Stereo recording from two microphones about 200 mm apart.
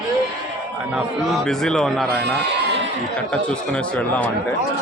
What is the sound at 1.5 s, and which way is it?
Speech, 5° left (ahead or behind).